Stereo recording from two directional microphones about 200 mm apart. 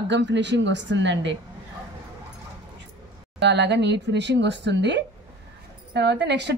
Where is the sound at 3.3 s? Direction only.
60° right (ahead or behind).